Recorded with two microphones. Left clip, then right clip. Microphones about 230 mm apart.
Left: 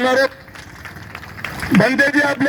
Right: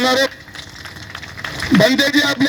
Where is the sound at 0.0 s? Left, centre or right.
Right.